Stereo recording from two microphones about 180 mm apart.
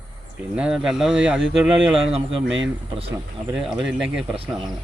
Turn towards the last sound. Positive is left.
turn(degrees=-30)  # may be behind; listen again after turning